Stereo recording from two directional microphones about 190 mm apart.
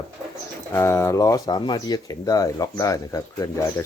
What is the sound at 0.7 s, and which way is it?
Speech, 15° left (ahead or behind).